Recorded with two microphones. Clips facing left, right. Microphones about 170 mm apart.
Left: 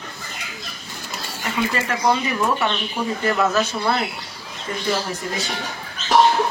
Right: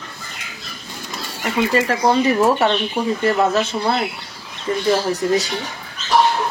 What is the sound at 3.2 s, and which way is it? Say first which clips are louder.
Speech: right 2 dB; 25° right (ahead or behind).